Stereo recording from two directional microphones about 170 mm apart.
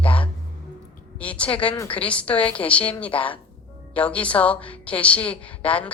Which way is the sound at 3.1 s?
30° left (ahead or behind).